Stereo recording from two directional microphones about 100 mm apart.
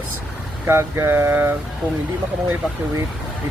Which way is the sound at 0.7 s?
25° right (ahead or behind).